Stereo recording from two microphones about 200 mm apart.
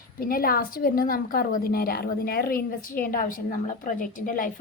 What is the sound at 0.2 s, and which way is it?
A woman's voice, 45° left (ahead or behind).